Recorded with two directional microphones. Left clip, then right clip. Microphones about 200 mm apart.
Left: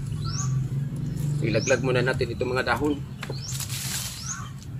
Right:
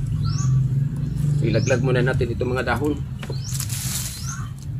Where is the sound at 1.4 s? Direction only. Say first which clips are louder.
Right 1 dB; 10° left (ahead or behind).